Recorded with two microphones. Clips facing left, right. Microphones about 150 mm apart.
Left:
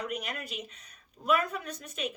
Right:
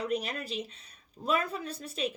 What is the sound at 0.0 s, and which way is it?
Speech, 30° right (ahead or behind).